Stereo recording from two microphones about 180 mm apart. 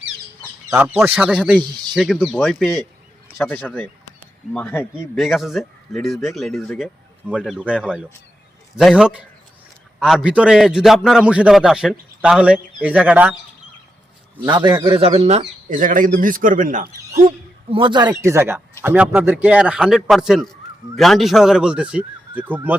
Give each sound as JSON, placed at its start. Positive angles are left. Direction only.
{"t": 0.9, "sound": "a man's voice", "side_deg": -5}
{"t": 5.1, "sound": "a man's voice", "side_deg": 0}
{"t": 14.5, "sound": "speech", "side_deg": -25}
{"t": 17.7, "sound": "speech", "side_deg": -30}
{"t": 18.1, "sound": "a man's voice", "side_deg": -15}